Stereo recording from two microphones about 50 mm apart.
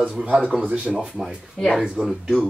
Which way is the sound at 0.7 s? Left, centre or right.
Right.